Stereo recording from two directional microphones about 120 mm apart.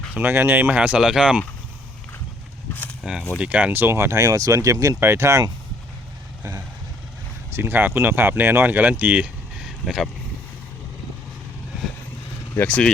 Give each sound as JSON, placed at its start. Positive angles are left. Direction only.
{"t": 0.1, "sound": "speech", "side_deg": -15}
{"t": 3.0, "sound": "speech", "side_deg": -5}
{"t": 7.5, "sound": "speech", "side_deg": -20}
{"t": 12.5, "sound": "speech", "side_deg": 10}